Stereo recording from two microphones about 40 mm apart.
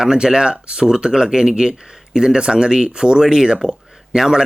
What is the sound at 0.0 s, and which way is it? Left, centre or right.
Speech, centre.